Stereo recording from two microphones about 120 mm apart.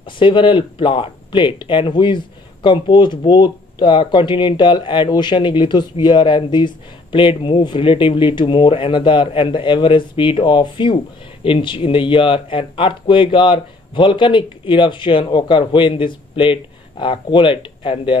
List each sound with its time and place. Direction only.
0.2 s speech: 45° left (ahead or behind)